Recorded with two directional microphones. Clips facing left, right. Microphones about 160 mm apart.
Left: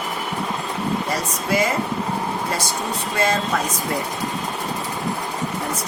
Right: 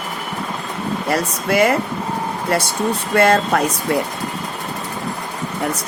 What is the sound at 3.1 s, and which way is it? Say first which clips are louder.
Speech: right 7 dB; 65° right (ahead or behind).